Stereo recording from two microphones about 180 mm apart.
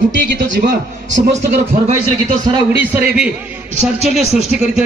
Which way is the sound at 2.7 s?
10° right (ahead or behind).